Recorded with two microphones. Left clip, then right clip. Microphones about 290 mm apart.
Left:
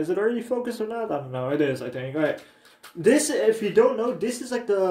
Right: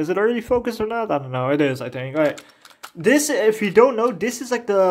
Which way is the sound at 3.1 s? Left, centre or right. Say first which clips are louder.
Right 4 dB; right.